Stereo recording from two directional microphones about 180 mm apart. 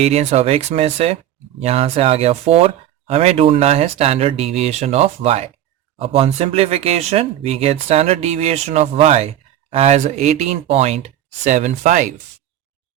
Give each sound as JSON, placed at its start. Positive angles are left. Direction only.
{"t": 0.0, "sound": "speech", "side_deg": -35}